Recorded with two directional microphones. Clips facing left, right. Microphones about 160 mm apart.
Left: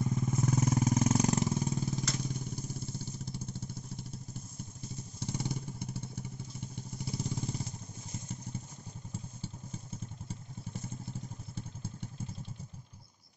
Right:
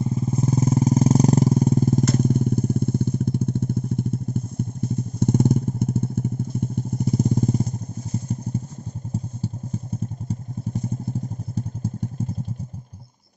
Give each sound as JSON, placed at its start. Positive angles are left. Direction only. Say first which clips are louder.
{"t": 0.0, "sound": "vehicle", "louder": "right 8 dB", "side_deg": -30}
{"t": 9.1, "sound": "motorcycle", "louder": "right 14 dB", "side_deg": -40}
{"t": 11.5, "sound": "motorcycle", "louder": "right 15 dB", "side_deg": -40}